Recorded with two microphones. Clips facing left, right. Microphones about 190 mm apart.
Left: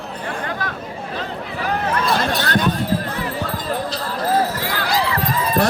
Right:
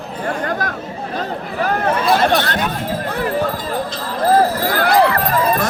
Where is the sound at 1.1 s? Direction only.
45° right (ahead or behind).